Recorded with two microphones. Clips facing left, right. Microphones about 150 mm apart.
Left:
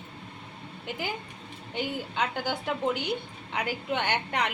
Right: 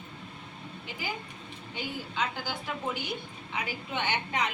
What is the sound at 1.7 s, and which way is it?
A woman's voice, 60° left (ahead or behind).